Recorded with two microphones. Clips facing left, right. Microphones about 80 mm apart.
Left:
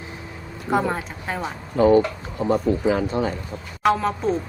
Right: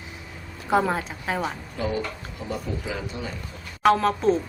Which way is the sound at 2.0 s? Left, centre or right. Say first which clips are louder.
Left 10 dB; left.